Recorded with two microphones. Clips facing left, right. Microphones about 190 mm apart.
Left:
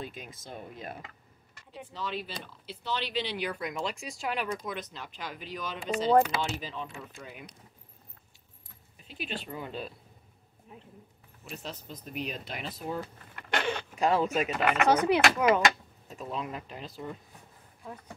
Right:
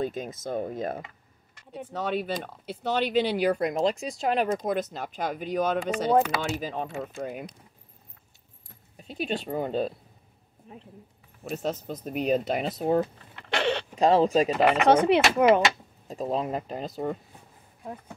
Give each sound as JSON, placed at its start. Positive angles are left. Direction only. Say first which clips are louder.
{"t": 0.0, "sound": "speech", "louder": "right 11 dB", "side_deg": -45}
{"t": 2.0, "sound": "speech", "louder": "right 9 dB", "side_deg": -55}
{"t": 8.9, "sound": "speech", "louder": "right 8 dB", "side_deg": -40}
{"t": 11.4, "sound": "speech", "louder": "right 11 dB", "side_deg": -45}
{"t": 13.7, "sound": "speech", "louder": "right 7 dB", "side_deg": -35}
{"t": 16.1, "sound": "speech", "louder": "right 8 dB", "side_deg": -35}